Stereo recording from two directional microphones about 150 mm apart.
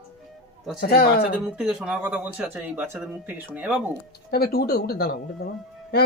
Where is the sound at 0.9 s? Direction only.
70° left (ahead or behind).